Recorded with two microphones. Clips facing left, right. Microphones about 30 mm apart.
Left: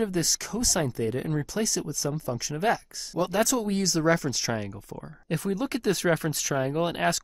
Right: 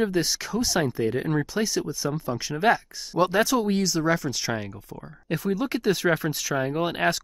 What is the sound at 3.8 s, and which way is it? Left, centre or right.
Speech, centre.